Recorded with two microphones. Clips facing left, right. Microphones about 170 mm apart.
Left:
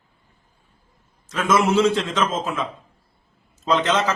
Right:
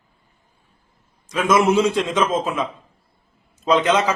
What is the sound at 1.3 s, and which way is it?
A man's voice, 15° right (ahead or behind).